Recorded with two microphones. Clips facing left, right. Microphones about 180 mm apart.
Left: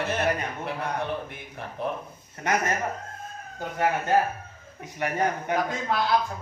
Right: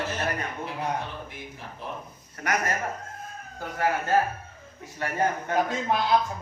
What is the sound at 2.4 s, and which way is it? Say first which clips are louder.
A man's voice: left 2 dB; 25° left (ahead or behind).